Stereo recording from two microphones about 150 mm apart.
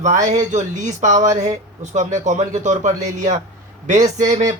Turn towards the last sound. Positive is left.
turn(degrees=-55)  # may be behind; listen again after turning